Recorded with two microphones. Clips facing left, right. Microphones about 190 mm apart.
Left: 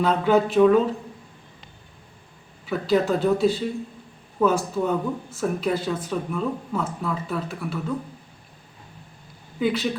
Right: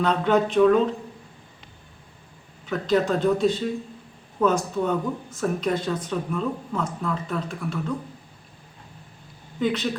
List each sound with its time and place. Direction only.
0.0 s speech: 5° left (ahead or behind)
2.6 s speech: 5° left (ahead or behind)
9.6 s speech: 5° left (ahead or behind)